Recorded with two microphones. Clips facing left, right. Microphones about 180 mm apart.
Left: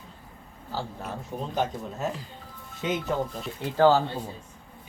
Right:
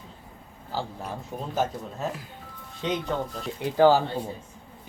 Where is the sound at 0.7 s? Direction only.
15° right (ahead or behind).